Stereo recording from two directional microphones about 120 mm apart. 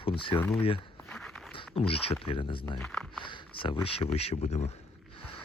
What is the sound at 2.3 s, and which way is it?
Speech, 45° left (ahead or behind).